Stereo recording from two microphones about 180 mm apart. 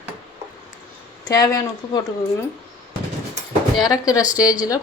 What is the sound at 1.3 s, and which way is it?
Speech, 20° left (ahead or behind).